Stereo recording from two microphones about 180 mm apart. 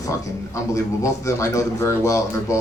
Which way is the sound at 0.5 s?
15° left (ahead or behind).